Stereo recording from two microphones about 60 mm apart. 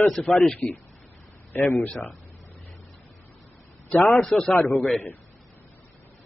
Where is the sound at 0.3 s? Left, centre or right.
Left.